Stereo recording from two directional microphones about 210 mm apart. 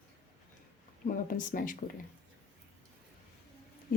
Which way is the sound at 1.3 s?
40° left (ahead or behind).